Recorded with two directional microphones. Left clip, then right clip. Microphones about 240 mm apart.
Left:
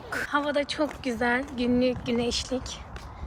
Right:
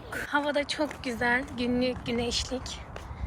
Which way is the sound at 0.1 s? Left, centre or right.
Centre.